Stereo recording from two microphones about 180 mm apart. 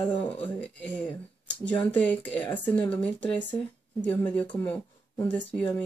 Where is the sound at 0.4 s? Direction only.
10° left (ahead or behind).